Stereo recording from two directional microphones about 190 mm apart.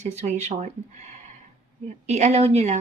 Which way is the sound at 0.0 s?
35° right (ahead or behind).